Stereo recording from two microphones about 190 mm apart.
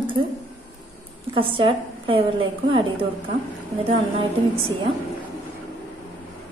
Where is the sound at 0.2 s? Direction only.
25° right (ahead or behind).